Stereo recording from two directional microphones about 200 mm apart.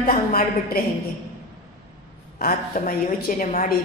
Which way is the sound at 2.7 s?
45° left (ahead or behind).